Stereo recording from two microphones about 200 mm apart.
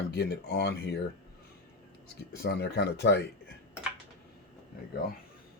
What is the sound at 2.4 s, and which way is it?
Speech, 55° left (ahead or behind).